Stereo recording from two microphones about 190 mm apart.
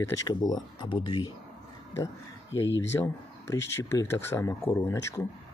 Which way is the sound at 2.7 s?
75° left (ahead or behind).